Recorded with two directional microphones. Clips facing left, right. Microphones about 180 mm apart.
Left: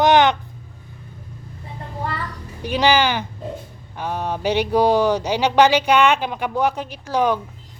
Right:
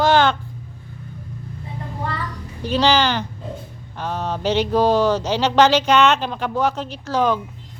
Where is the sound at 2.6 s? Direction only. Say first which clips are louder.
Even; 15° left (ahead or behind).